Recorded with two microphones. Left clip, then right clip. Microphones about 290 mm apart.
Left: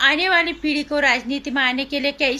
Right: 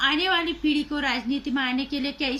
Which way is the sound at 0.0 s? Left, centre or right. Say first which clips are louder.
Left 6 dB; centre.